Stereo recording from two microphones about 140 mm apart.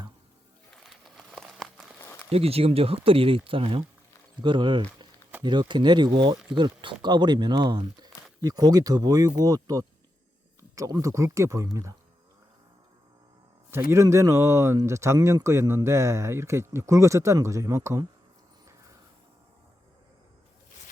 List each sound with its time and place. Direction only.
0.7 s a sound: centre (ahead or behind)
2.3 s speech: 45° right (ahead or behind); by 11.9 s 25° right (ahead or behind)
13.9 s speech: 20° right (ahead or behind)